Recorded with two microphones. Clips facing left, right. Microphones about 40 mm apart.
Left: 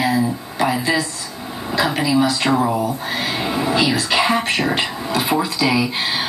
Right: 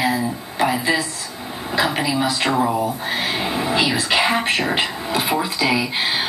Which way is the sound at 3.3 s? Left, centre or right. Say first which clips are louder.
Left 3 dB; centre.